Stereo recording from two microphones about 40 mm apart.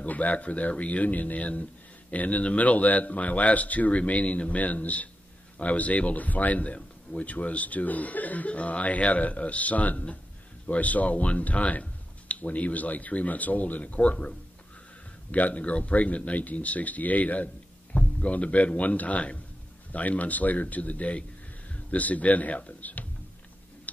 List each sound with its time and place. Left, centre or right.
0.0 s speech: left
15.3 s speech: left